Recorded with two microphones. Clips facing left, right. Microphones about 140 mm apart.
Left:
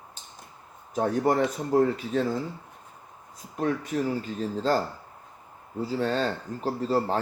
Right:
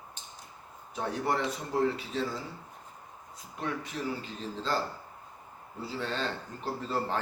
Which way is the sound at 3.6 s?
45° left (ahead or behind).